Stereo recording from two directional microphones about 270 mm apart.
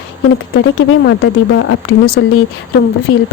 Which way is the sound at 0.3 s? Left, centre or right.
Left.